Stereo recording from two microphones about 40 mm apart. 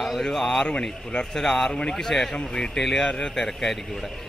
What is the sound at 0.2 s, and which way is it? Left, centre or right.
Speech, centre.